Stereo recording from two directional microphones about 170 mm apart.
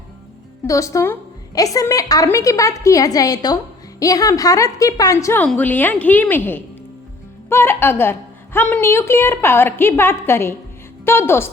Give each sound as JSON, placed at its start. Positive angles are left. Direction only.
{"t": 0.6, "sound": "a woman's voice", "side_deg": 20}